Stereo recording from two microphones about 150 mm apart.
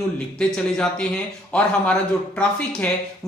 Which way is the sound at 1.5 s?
5° left (ahead or behind).